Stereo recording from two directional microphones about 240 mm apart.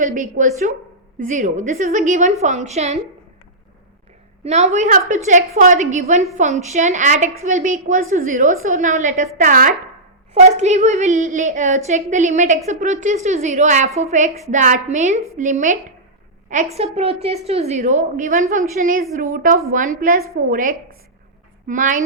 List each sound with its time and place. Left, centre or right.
0.0 s a woman's voice: right
4.4 s a woman's voice: right